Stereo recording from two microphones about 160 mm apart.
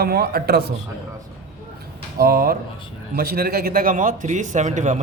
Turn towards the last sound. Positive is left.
turn(degrees=-50)  # may be behind; listen again after turning